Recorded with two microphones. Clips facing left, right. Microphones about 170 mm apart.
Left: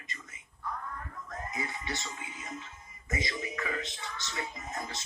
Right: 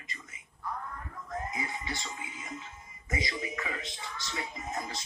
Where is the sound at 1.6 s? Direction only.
15° right (ahead or behind).